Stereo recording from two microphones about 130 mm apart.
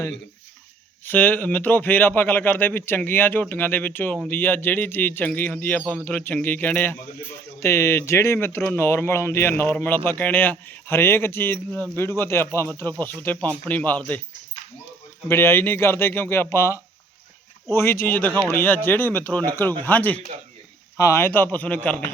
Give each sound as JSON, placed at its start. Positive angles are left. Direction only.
{"t": 1.0, "sound": "speech", "side_deg": 15}
{"t": 15.3, "sound": "speech", "side_deg": 15}